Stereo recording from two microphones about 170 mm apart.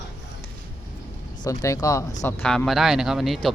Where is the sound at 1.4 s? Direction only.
20° left (ahead or behind).